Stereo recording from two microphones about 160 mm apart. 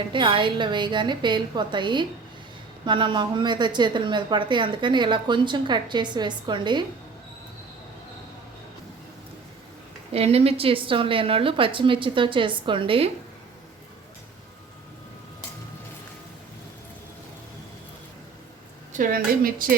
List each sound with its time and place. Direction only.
0.1 s a woman's voice: 30° right (ahead or behind)
10.1 s a woman's voice: 40° right (ahead or behind)
18.9 s a woman's voice: 60° right (ahead or behind)